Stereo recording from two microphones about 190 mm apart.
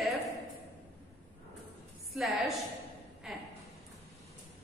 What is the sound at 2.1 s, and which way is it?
Speech, centre (ahead or behind).